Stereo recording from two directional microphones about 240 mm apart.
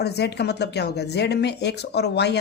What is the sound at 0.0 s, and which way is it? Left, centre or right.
Speech, left.